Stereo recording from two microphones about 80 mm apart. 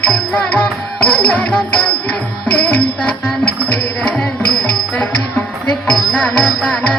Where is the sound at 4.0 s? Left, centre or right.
Centre.